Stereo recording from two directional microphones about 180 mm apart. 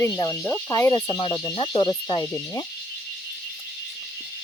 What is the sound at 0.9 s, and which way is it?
Speech, 25° left (ahead or behind).